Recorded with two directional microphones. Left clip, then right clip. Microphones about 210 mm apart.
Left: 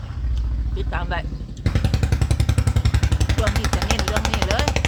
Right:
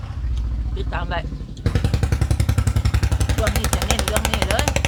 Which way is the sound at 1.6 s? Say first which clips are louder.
Right 1 dB; 30° right (ahead or behind).